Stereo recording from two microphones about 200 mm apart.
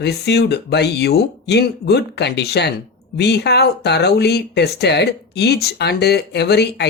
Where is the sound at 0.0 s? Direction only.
55° left (ahead or behind).